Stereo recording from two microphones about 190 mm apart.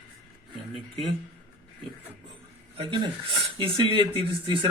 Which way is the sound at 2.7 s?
25° right (ahead or behind).